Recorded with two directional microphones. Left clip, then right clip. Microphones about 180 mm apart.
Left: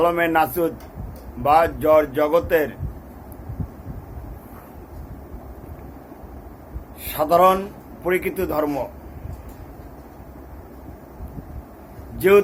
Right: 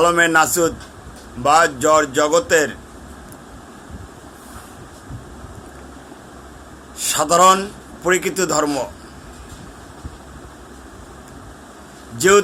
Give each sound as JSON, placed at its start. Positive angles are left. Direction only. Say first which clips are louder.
{"t": 0.0, "sound": "a man's voice", "louder": "right 4 dB", "side_deg": -20}
{"t": 7.0, "sound": "a man's voice", "louder": "right 3 dB", "side_deg": -25}